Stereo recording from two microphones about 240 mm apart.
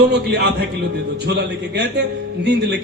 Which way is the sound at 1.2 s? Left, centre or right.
Right.